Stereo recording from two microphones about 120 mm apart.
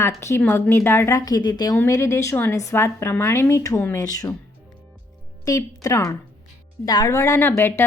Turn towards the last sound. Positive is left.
turn(degrees=20)  # may be behind; listen again after turning